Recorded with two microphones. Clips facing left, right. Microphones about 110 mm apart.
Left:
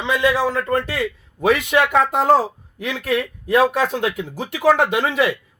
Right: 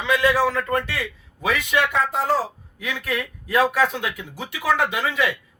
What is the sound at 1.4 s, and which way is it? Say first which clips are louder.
A man's voice: left 5 dB; 50° left (ahead or behind).